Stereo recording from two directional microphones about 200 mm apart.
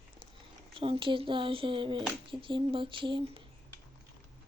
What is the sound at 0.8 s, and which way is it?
Speech, 25° right (ahead or behind).